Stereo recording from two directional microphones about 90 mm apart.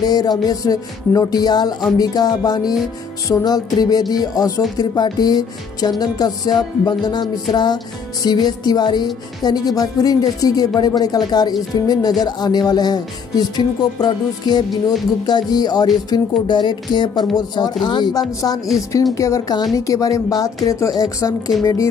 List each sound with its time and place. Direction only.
0.0 s music: 50° left (ahead or behind)
16.1 s speech: 55° left (ahead or behind)
17.4 s music: 50° left (ahead or behind)
18.8 s a woman's voice: 40° left (ahead or behind)